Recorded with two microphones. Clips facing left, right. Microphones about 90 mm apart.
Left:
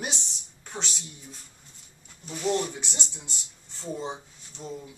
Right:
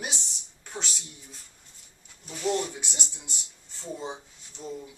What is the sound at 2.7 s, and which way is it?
Speech, 10° right (ahead or behind).